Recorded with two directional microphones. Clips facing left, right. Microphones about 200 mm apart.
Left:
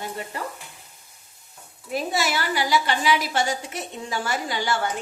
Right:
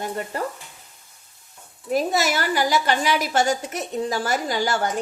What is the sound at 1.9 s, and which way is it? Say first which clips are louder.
A woman's voice: right 4 dB; 40° right (ahead or behind).